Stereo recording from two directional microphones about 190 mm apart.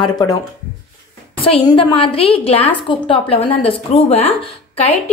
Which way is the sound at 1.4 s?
30° left (ahead or behind).